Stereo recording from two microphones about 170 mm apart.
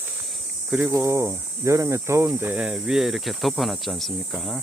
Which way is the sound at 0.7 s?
10° right (ahead or behind).